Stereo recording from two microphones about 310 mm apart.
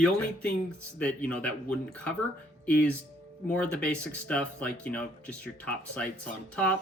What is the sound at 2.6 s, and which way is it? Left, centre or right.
Speech, centre.